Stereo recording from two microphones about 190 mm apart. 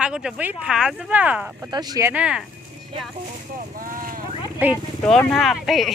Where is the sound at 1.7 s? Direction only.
15° right (ahead or behind).